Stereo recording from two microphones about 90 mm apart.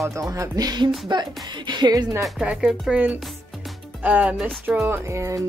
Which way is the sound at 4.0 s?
15° right (ahead or behind).